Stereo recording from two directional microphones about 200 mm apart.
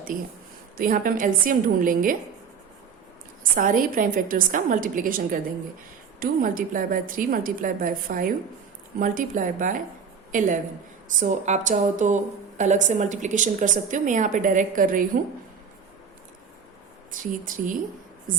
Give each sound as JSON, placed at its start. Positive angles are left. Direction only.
{"t": 0.1, "sound": "a woman's voice", "side_deg": -45}
{"t": 3.5, "sound": "a woman's voice", "side_deg": -45}
{"t": 17.2, "sound": "a woman's voice", "side_deg": -40}